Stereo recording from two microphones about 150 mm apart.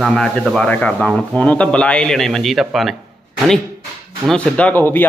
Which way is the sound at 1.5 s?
10° left (ahead or behind).